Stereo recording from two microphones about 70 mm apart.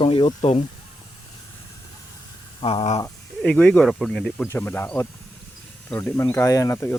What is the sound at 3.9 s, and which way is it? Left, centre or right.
Speech, centre.